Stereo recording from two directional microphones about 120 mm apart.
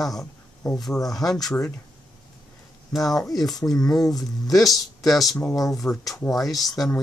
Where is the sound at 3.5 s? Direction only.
Centre (ahead or behind).